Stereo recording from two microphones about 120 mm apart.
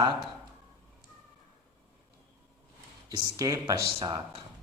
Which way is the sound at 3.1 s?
35° right (ahead or behind).